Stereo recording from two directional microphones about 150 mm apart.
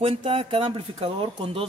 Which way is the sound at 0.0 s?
40° right (ahead or behind).